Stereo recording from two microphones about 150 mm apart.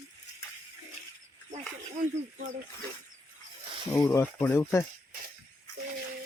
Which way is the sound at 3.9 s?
20° left (ahead or behind).